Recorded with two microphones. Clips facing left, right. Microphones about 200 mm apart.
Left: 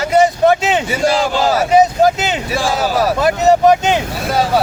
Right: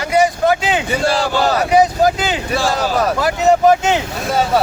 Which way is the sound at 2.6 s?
Centre (ahead or behind).